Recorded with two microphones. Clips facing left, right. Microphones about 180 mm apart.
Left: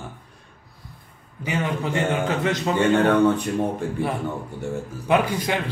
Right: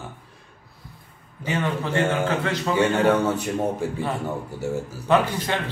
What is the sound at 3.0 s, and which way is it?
Speech, 5° right (ahead or behind).